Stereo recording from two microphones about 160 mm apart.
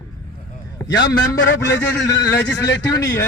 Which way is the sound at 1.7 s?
15° left (ahead or behind).